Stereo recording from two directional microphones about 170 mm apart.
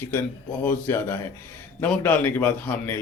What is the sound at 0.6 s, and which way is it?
Speech, 10° left (ahead or behind).